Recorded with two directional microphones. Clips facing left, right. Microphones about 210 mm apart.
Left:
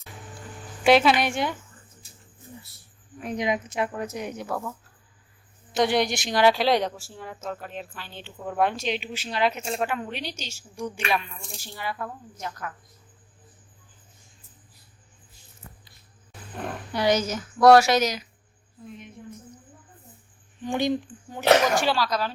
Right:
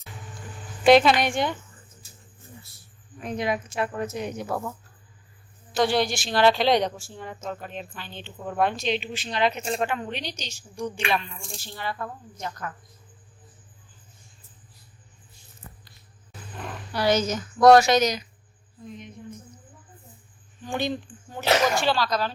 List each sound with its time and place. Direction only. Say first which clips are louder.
0.0 s a sound: even; centre (ahead or behind)
0.9 s a woman's voice: right 2 dB; 5° left (ahead or behind)
3.2 s a woman's voice: left 1 dB; 10° left (ahead or behind)
5.7 s speech: even; 20° left (ahead or behind)
16.9 s a woman's voice: right 1 dB; 15° left (ahead or behind)
20.7 s a woman's voice: left 3 dB; 15° left (ahead or behind)